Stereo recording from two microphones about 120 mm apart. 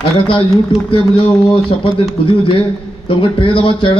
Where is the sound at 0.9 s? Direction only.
45° left (ahead or behind).